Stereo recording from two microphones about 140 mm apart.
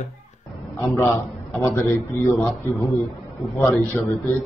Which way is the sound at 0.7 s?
20° left (ahead or behind).